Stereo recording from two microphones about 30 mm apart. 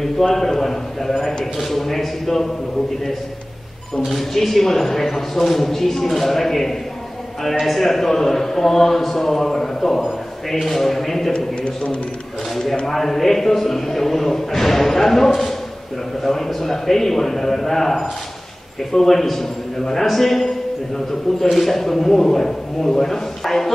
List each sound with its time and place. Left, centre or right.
0.2 s a man's voice: centre
4.1 s a man's voice: centre
11.3 s a man's voice: left
12.8 s a man's voice: centre